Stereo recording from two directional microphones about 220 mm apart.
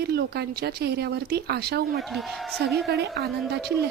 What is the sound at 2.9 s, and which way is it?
Speech, 45° right (ahead or behind).